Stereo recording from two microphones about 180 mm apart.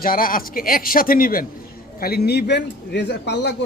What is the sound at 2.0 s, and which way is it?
Speech, 60° left (ahead or behind).